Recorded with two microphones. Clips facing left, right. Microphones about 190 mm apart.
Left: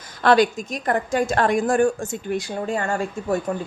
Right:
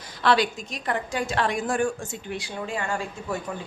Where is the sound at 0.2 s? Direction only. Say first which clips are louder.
Left 6 dB; 45° left (ahead or behind).